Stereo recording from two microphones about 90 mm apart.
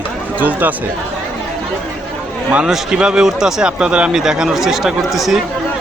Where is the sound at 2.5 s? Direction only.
10° right (ahead or behind).